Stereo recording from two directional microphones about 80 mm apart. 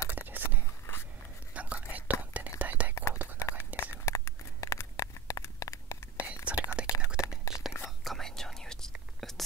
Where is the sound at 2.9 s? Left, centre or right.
Left.